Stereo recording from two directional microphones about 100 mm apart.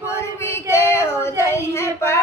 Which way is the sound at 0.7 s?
25° left (ahead or behind).